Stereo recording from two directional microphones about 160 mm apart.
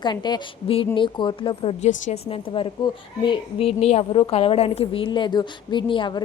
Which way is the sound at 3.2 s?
35° left (ahead or behind).